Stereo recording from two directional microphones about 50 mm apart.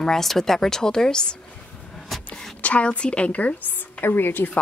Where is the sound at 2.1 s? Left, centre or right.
Centre.